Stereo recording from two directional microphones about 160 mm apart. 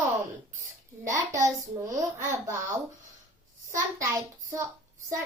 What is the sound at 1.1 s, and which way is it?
A child's voice, 20° right (ahead or behind).